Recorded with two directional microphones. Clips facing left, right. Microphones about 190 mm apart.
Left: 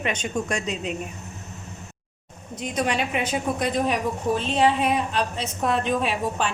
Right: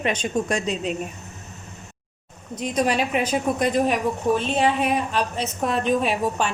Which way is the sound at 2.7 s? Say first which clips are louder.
Right 3 dB; 45° right (ahead or behind).